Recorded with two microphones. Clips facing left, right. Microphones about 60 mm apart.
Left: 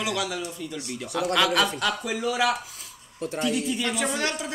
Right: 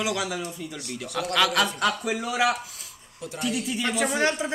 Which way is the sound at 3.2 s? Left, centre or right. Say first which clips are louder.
Left 5 dB; left.